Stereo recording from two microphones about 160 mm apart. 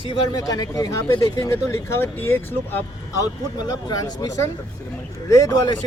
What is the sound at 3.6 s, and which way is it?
Speech, 25° left (ahead or behind).